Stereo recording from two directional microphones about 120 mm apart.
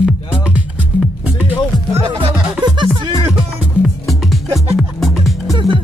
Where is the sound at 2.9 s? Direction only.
40° right (ahead or behind).